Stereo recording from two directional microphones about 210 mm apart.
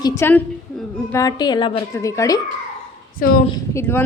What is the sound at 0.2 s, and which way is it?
A woman's voice, 10° left (ahead or behind).